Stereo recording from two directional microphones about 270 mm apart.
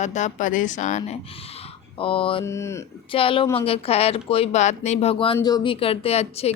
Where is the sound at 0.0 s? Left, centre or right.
Left.